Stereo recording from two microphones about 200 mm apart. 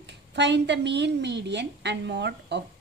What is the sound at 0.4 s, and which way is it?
A woman's voice, 60° right (ahead or behind).